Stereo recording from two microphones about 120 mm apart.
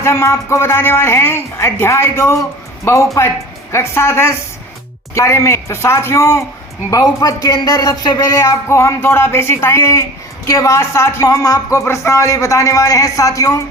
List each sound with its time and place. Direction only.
0.0 s speech: 20° left (ahead or behind)